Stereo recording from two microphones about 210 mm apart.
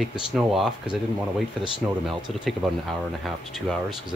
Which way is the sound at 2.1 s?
Centre (ahead or behind).